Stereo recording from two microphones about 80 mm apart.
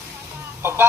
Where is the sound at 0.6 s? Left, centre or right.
Right.